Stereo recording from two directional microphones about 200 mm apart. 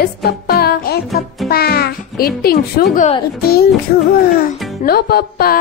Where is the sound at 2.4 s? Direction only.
50° left (ahead or behind).